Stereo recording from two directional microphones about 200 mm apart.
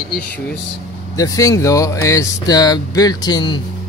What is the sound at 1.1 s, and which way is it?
Speech, 15° left (ahead or behind).